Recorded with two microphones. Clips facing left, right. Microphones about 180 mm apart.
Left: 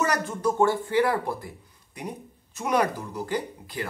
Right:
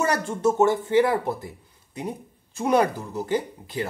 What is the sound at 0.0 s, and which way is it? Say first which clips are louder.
Speech: right 3 dB; 30° right (ahead or behind).